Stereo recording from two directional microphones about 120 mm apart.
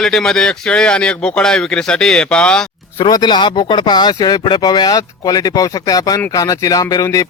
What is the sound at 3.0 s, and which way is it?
Speech, 35° left (ahead or behind).